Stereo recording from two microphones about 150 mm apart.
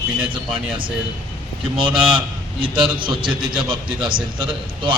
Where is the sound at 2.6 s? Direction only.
35° right (ahead or behind).